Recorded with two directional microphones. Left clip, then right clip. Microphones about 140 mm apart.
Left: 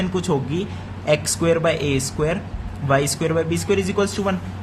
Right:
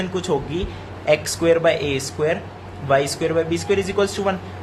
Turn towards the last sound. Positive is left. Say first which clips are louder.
# right 1 dB
turn(degrees=20)  # may be behind; listen again after turning